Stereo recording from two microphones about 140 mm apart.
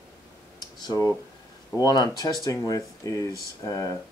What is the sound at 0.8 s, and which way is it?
Speech, 25° left (ahead or behind).